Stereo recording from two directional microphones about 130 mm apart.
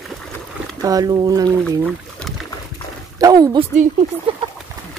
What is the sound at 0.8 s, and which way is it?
Speech, 30° right (ahead or behind).